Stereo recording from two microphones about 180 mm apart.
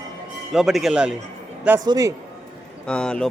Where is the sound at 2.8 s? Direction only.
5° left (ahead or behind).